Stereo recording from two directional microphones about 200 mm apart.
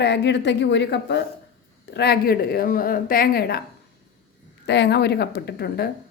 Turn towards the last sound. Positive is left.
turn(degrees=55)  # may be behind; listen again after turning